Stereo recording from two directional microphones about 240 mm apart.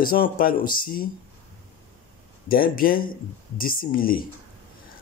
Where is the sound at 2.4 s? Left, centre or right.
Left.